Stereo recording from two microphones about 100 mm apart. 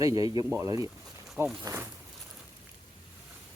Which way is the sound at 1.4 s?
25° right (ahead or behind).